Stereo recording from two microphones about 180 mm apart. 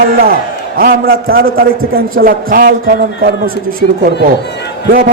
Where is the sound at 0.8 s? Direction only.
55° right (ahead or behind).